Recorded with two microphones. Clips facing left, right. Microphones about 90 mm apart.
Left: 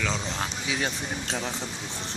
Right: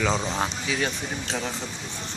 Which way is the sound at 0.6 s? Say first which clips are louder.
Right 2 dB; 15° left (ahead or behind).